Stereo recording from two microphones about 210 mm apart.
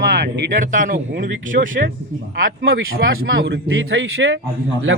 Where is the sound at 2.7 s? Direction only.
75° right (ahead or behind).